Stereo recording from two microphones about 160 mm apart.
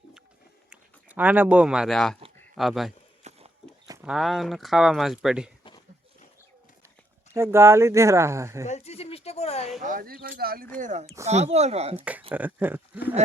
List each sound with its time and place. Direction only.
0.7 s speech: 10° right (ahead or behind)
3.2 s a sound: 40° right (ahead or behind)
4.0 s speech: centre (ahead or behind)
7.3 s speech: 15° right (ahead or behind)
8.6 s a woman's voice: 45° left (ahead or behind)
9.8 s speech: 60° right (ahead or behind)
10.8 s speech: 50° right (ahead or behind)
11.9 s speech: 10° right (ahead or behind)